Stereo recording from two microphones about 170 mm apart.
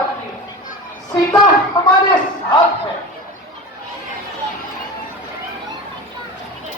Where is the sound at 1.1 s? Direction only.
25° left (ahead or behind).